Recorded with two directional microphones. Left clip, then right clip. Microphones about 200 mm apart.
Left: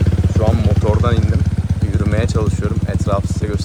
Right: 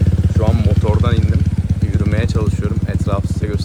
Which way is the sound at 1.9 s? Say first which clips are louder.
Left 2 dB; centre (ahead or behind).